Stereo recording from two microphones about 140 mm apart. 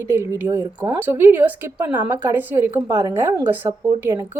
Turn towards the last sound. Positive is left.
turn(degrees=-20)  # may be behind; listen again after turning